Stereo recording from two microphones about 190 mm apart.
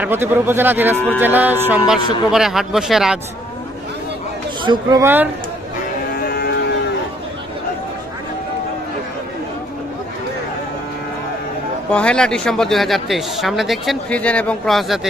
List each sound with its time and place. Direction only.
0.0 s speech: 10° right (ahead or behind)
0.9 s speech: 10° left (ahead or behind)
1.2 s speech: 10° right (ahead or behind)
4.6 s speech: 20° right (ahead or behind)
6.2 s cattle: 55° left (ahead or behind)
11.9 s speech: 5° left (ahead or behind)